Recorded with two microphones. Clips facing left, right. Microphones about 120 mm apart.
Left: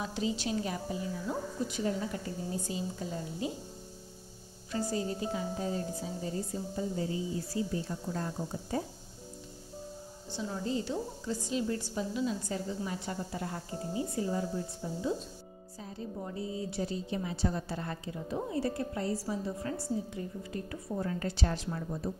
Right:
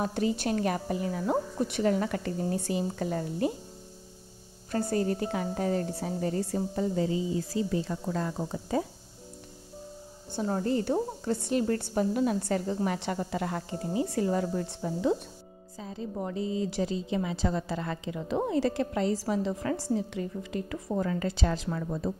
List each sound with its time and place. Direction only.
0.0 s a woman's voice: 55° right (ahead or behind)
4.7 s a woman's voice: 60° right (ahead or behind); by 8.5 s 90° right
10.3 s a woman's voice: 55° right (ahead or behind); by 13.7 s 85° right
13.9 s a woman's voice: 75° right (ahead or behind)
16.2 s a woman's voice: 90° right